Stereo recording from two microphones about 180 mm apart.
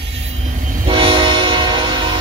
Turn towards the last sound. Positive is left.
turn(degrees=-25)  # may be behind; listen again after turning